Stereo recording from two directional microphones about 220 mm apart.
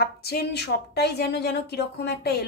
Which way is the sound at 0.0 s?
45° left (ahead or behind).